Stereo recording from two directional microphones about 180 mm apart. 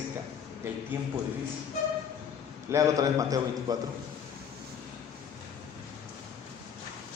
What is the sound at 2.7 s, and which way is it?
A man's voice, 20° right (ahead or behind).